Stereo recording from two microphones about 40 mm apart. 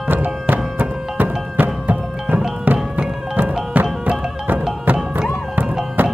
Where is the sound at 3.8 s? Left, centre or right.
Right.